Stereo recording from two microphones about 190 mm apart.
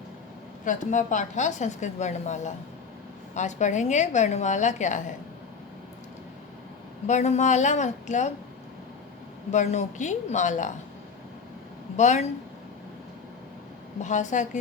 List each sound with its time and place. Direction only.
0.6 s a woman's voice: 40° left (ahead or behind)
7.1 s a woman's voice: 35° left (ahead or behind)
9.5 s a woman's voice: 40° left (ahead or behind)
11.9 s a woman's voice: 40° left (ahead or behind)
14.0 s a woman's voice: 40° left (ahead or behind)